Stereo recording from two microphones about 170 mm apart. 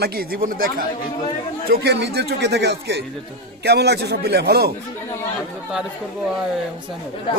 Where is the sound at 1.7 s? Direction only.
80° right.